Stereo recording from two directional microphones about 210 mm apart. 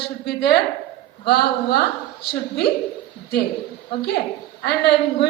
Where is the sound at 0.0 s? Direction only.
50° left (ahead or behind).